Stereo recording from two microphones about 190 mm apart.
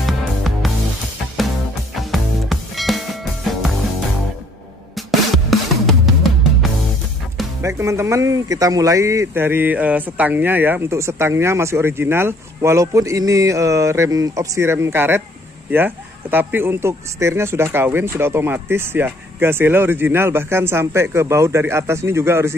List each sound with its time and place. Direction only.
0.0 s music: centre (ahead or behind)
2.0 s music: centre (ahead or behind)
4.9 s music: centre (ahead or behind)
7.6 s speech: 15° right (ahead or behind)